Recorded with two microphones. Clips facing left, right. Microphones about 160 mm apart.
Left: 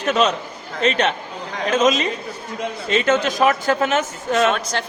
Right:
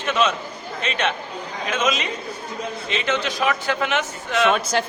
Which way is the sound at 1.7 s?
40° left (ahead or behind).